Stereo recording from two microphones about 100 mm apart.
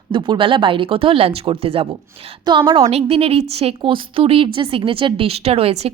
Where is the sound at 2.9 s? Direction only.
85° right.